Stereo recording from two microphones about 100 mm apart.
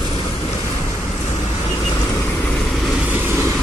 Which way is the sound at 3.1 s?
20° right (ahead or behind).